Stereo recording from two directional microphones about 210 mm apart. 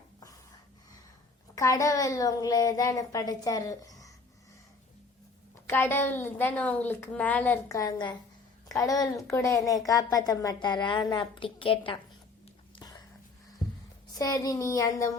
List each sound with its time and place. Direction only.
1.5 s a woman's voice: 15° left (ahead or behind)
5.6 s a woman's voice: 10° left (ahead or behind)
12.7 s whispering: 20° left (ahead or behind)
14.2 s a woman's voice: 20° left (ahead or behind)